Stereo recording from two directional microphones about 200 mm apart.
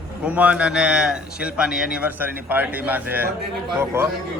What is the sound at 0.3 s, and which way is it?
A man's voice, 5° right (ahead or behind).